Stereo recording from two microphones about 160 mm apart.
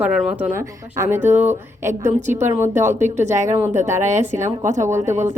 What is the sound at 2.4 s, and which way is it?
Speech, 15° right (ahead or behind).